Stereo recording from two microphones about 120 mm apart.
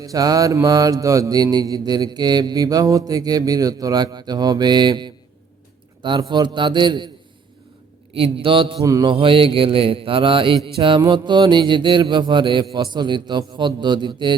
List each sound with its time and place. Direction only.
0.0 s mantra: 30° right (ahead or behind)
8.1 s mantra: 50° right (ahead or behind)
8.8 s mantra: 25° right (ahead or behind)
9.0 s mantra: 50° right (ahead or behind)